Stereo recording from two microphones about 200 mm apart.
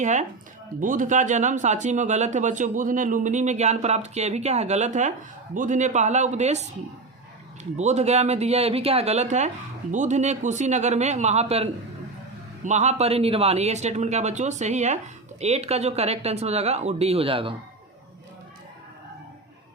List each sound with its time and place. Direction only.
0.0 s speech: 35° right (ahead or behind)